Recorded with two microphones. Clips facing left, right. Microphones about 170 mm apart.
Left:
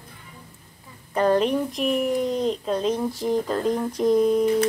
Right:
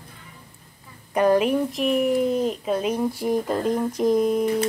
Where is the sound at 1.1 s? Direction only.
10° right (ahead or behind).